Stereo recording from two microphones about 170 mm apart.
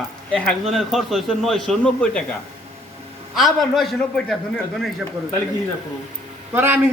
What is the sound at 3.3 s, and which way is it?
A man's voice, centre (ahead or behind).